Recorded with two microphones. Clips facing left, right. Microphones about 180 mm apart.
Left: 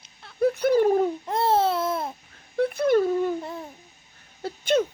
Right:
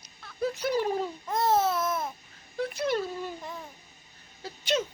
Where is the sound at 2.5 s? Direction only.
55° left (ahead or behind).